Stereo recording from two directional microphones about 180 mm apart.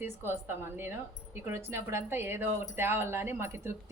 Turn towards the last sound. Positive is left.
turn(degrees=-15)  # may be behind; listen again after turning